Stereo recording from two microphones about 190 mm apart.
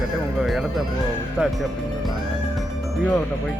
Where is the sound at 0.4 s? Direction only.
Centre (ahead or behind).